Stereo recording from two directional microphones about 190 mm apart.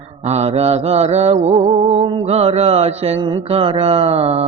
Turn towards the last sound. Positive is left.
turn(degrees=-35)  # may be behind; listen again after turning